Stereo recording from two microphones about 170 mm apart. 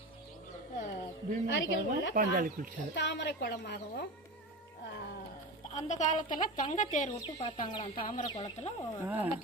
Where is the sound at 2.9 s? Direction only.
90° left; by 4.0 s 70° left (ahead or behind).